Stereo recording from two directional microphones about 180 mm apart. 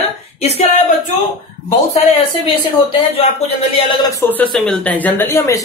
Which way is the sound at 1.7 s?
35° left (ahead or behind).